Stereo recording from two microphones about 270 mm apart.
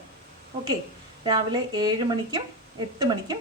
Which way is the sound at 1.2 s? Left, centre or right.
Centre.